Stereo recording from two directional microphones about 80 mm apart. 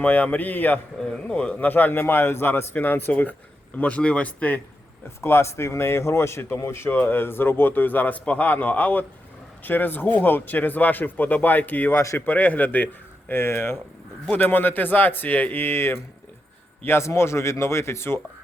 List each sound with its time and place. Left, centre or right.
0.0 s speech: left
0.9 s speech: centre
1.5 s speech: left
5.0 s a man's voice: left
11.9 s a man's voice: left
12.2 s a man's voice: left